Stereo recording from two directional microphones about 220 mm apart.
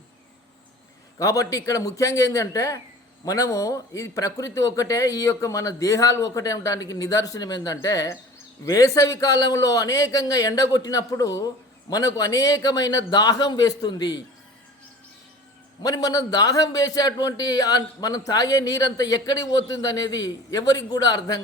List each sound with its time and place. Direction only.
1.2 s a man's voice: 15° left (ahead or behind)
15.8 s a man's voice: 15° left (ahead or behind)